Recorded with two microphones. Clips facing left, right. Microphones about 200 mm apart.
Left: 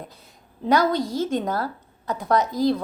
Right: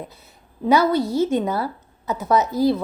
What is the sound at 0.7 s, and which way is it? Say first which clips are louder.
A woman's voice: right 3 dB; 5° right (ahead or behind).